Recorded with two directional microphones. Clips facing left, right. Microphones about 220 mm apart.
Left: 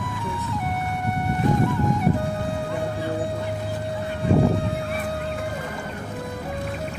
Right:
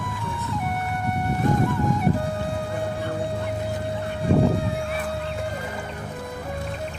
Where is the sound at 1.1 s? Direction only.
Centre (ahead or behind).